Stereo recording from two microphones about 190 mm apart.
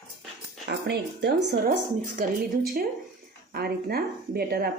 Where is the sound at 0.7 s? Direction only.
60° right (ahead or behind).